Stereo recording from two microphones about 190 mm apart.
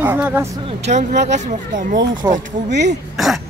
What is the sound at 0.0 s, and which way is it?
Speech, 10° right (ahead or behind).